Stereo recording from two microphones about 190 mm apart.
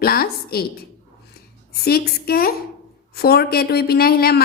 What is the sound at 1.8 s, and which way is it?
Speech, 55° left (ahead or behind).